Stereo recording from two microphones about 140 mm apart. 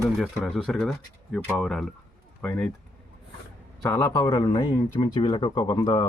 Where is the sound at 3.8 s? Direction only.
25° left (ahead or behind).